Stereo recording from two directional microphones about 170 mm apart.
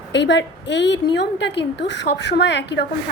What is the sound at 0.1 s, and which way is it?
A woman's voice, 90° left.